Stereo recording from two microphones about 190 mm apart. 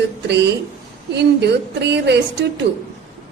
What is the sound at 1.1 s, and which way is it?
A woman's voice, 60° right (ahead or behind).